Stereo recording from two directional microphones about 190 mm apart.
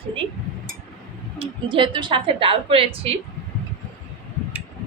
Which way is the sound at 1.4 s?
25° right (ahead or behind).